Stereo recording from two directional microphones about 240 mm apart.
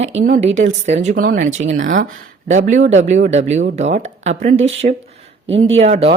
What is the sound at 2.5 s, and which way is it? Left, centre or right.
Speech, right.